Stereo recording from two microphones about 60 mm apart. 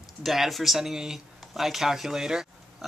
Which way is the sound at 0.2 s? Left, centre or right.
Centre.